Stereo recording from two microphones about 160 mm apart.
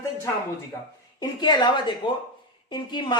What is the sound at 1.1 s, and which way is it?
A woman's voice, 25° left (ahead or behind).